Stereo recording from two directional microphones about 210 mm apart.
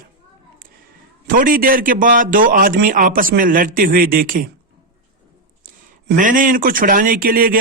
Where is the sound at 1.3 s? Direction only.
40° right (ahead or behind).